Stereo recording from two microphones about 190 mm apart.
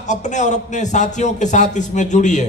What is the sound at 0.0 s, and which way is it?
A man's voice, 40° left (ahead or behind).